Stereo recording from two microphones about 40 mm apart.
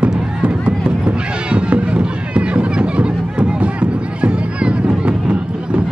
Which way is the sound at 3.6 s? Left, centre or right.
Right.